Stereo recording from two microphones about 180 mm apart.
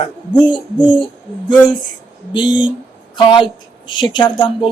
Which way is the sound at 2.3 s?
25° left (ahead or behind).